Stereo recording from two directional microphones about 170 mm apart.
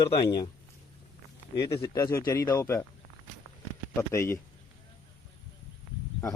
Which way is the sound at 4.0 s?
15° left (ahead or behind).